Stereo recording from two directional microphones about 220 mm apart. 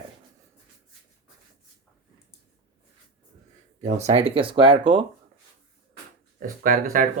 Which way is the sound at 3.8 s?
30° right (ahead or behind).